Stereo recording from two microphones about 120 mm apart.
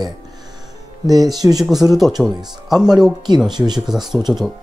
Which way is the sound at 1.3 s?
30° right (ahead or behind).